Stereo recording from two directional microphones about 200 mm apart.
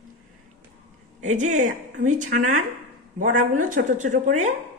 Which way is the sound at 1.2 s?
40° right (ahead or behind).